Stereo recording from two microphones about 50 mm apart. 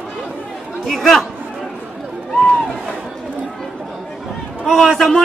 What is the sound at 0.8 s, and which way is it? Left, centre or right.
Speech, centre.